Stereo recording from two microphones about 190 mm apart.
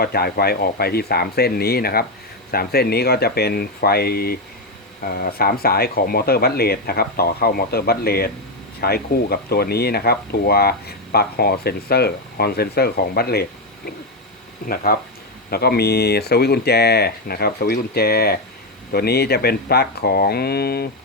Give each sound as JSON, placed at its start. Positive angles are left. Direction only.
{"t": 0.0, "sound": "speech", "side_deg": 55}